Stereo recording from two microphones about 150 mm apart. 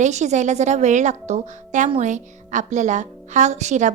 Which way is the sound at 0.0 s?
50° right (ahead or behind).